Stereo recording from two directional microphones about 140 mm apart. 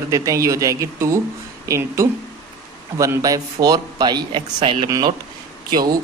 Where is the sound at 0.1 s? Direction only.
20° right (ahead or behind); by 4.9 s 40° right (ahead or behind).